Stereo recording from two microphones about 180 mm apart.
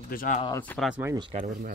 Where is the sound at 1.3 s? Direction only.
45° right (ahead or behind).